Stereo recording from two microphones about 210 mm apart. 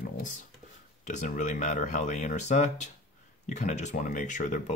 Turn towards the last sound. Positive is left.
turn(degrees=35)  # may be behind; listen again after turning